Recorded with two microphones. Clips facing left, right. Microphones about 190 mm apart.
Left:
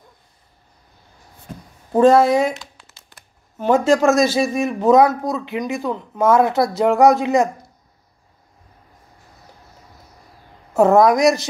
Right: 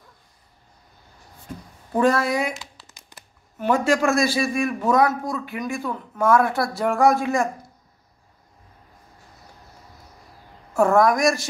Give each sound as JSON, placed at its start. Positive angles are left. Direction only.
{"t": 1.9, "sound": "speech", "side_deg": 25}
{"t": 2.9, "sound": "a sound", "side_deg": -15}
{"t": 3.5, "sound": "speech", "side_deg": 25}
{"t": 10.7, "sound": "speech", "side_deg": 20}